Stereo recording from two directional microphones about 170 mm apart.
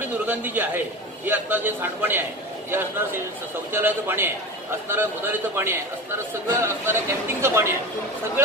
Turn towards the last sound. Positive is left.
turn(degrees=-15)  # may be behind; listen again after turning